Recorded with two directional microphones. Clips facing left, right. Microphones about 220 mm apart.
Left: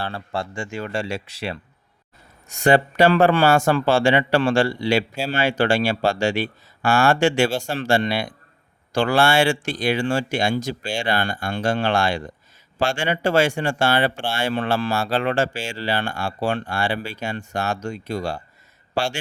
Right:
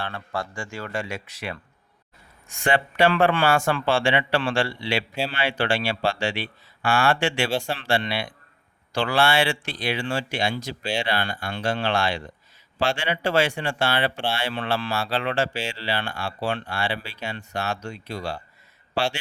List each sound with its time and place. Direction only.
0.0 s speech: 30° left (ahead or behind)
2.5 s speech: 40° left (ahead or behind)